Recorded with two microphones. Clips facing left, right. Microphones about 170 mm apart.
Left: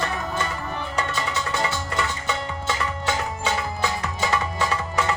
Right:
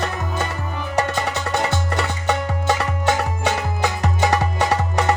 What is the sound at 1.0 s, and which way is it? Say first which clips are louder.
Music: right 6 dB; 65° right (ahead or behind).